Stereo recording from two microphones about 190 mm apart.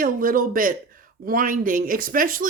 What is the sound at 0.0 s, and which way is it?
Speech, 45° right (ahead or behind).